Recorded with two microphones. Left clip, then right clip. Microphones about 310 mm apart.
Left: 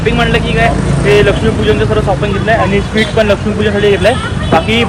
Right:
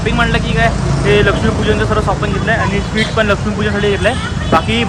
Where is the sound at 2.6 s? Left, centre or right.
Right.